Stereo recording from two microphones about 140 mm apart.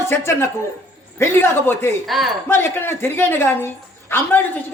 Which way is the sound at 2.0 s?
Centre (ahead or behind).